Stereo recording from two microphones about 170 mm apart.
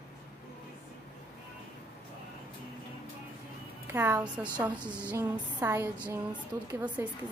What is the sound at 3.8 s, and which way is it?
A woman's voice, 15° right (ahead or behind).